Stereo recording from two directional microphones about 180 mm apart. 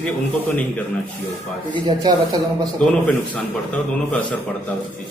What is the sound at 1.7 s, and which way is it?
Speech, 25° right (ahead or behind).